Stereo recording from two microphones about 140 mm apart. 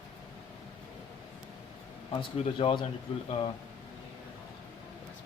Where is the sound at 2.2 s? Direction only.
40° left (ahead or behind).